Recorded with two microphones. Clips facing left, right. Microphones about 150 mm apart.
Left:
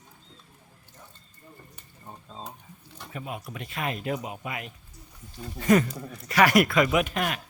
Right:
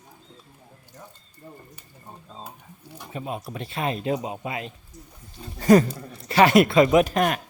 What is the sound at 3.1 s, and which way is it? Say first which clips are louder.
Speech: right 5 dB; 30° right (ahead or behind).